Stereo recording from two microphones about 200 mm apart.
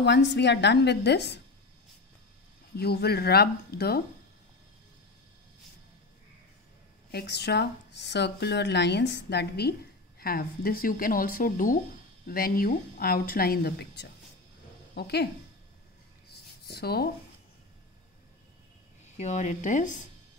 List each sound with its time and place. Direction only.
0.0 s speech: 60° left (ahead or behind)
2.8 s a woman's voice: 50° left (ahead or behind)
7.1 s a woman's voice: 55° left (ahead or behind)
16.6 s speech: 55° left (ahead or behind)
19.1 s speech: 35° left (ahead or behind)